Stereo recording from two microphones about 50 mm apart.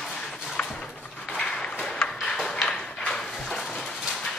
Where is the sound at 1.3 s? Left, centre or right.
Centre.